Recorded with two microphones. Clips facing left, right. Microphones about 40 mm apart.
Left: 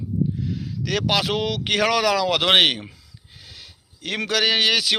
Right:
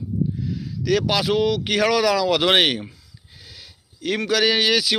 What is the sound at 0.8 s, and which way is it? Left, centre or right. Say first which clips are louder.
Speech: right 2 dB; left.